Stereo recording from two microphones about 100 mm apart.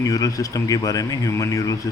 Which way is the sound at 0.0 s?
35° left (ahead or behind).